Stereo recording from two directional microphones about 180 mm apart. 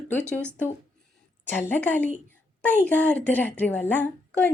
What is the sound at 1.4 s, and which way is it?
A woman's voice, 10° left (ahead or behind).